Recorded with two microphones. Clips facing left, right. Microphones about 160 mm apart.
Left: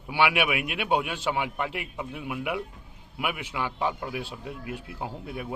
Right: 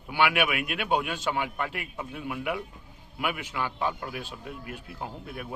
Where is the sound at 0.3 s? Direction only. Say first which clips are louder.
Left 1 dB; 15° left (ahead or behind).